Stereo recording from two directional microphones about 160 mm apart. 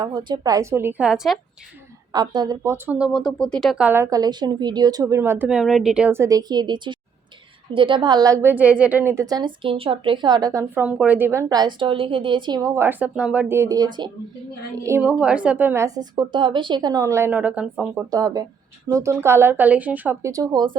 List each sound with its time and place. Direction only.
0.0 s speech: 25° right (ahead or behind); by 1.4 s 5° right (ahead or behind)
2.1 s a woman's voice: 25° right (ahead or behind)
2.7 s a woman's voice: 10° right (ahead or behind)
10.8 s a woman's voice: 10° right (ahead or behind); by 14.1 s 25° right (ahead or behind)
14.8 s speech: 10° right (ahead or behind)
18.1 s a woman's voice: 20° right (ahead or behind)